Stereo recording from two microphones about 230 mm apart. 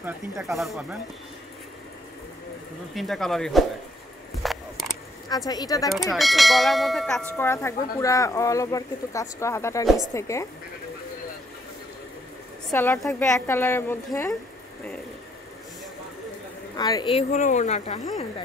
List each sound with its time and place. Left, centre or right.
0.0 s speech: centre
2.9 s speech: centre
4.4 s a sound: centre
5.5 s speech: centre
6.1 s speech: centre
12.6 s speech: centre
16.7 s speech: centre